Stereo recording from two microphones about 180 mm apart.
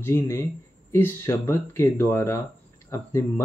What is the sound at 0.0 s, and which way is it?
Speech, 15° left (ahead or behind).